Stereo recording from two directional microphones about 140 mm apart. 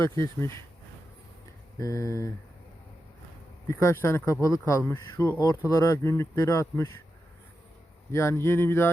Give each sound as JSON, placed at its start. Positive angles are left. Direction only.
{"t": 0.0, "sound": "speech", "side_deg": 20}
{"t": 1.8, "sound": "speech", "side_deg": 25}
{"t": 3.7, "sound": "speech", "side_deg": 20}
{"t": 8.1, "sound": "speech", "side_deg": 20}